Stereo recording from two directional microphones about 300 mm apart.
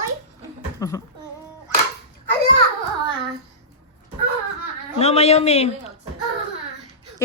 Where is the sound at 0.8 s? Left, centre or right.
Centre.